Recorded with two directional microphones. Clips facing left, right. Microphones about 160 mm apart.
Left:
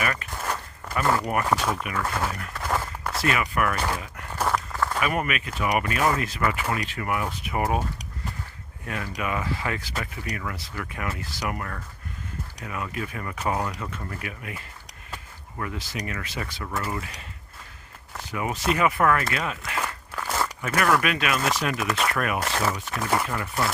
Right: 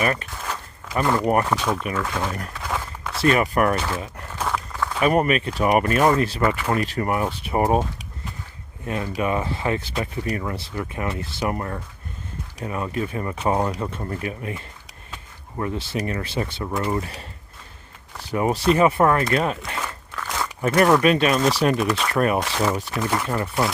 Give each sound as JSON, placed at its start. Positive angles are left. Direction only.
{"t": 0.0, "sound": "speech", "side_deg": -30}
{"t": 1.5, "sound": "speech", "side_deg": 5}
{"t": 2.6, "sound": "walk", "side_deg": 5}
{"t": 3.2, "sound": "speech", "side_deg": -35}
{"t": 3.8, "sound": "speech", "side_deg": 10}
{"t": 4.4, "sound": "a sound", "side_deg": 5}
{"t": 4.9, "sound": "speech", "side_deg": -35}
{"t": 8.9, "sound": "speech", "side_deg": -25}
{"t": 18.3, "sound": "speech", "side_deg": -35}
{"t": 19.8, "sound": "a sound", "side_deg": 10}
{"t": 20.6, "sound": "speech", "side_deg": -30}
{"t": 21.8, "sound": "speech", "side_deg": 5}
{"t": 22.1, "sound": "speech", "side_deg": -30}
{"t": 22.4, "sound": "speech", "side_deg": 0}